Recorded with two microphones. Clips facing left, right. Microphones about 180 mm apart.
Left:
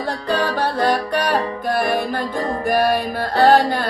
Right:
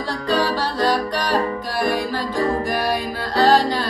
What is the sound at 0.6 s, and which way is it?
Music, 60° left (ahead or behind).